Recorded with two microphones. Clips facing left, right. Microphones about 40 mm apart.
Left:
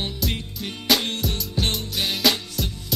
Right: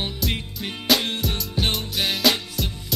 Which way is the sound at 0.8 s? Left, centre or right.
Centre.